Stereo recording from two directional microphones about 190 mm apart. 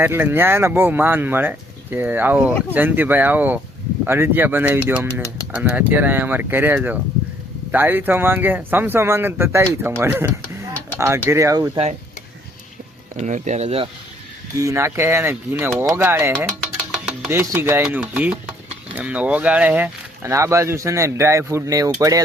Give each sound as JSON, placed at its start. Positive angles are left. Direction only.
{"t": 0.0, "sound": "speech", "side_deg": -10}
{"t": 13.2, "sound": "speech", "side_deg": -40}
{"t": 14.6, "sound": "speech", "side_deg": -15}